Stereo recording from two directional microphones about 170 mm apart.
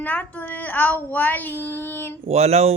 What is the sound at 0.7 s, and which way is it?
Speech, 10° left (ahead or behind).